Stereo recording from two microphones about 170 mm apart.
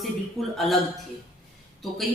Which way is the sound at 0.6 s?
Centre (ahead or behind).